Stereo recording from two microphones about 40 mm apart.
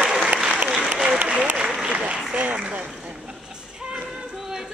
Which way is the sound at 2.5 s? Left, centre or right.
Right.